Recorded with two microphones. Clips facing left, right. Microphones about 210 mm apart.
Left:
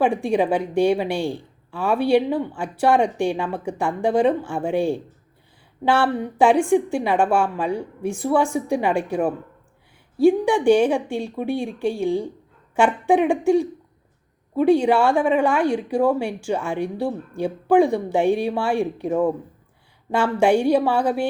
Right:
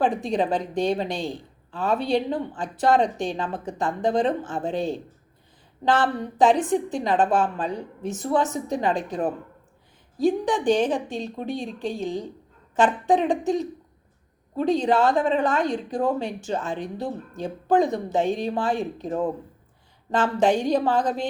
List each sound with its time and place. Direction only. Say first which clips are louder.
0.3 s a woman's voice: left 4 dB; 10° left (ahead or behind)